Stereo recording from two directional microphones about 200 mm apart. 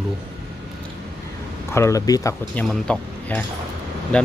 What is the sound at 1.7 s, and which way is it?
Speech, 15° left (ahead or behind).